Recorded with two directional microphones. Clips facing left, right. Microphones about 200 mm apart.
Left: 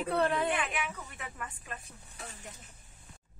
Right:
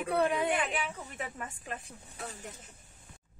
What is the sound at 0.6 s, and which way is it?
Speech, 30° right (ahead or behind).